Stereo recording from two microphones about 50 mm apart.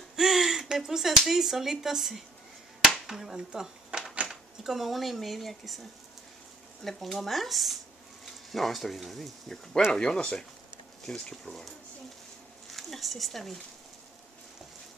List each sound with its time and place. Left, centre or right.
0.1 s speech: centre
6.8 s speech: centre
9.9 s speech: centre
12.6 s a sound: centre